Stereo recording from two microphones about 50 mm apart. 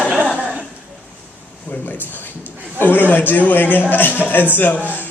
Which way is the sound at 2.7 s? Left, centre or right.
Left.